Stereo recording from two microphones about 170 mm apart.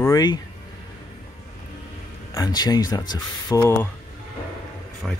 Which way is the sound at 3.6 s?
10° left (ahead or behind).